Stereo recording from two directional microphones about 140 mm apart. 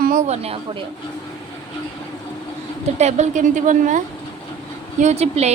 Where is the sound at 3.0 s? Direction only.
55° right (ahead or behind).